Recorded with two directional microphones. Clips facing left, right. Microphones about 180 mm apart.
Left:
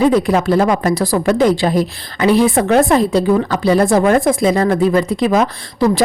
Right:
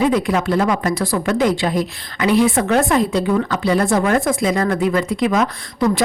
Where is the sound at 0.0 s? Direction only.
35° left (ahead or behind).